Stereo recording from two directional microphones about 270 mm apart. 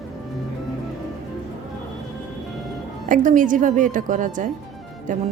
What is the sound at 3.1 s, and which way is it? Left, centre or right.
A woman's voice, right.